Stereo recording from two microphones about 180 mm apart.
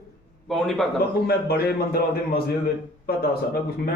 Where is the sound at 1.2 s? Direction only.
60° left (ahead or behind).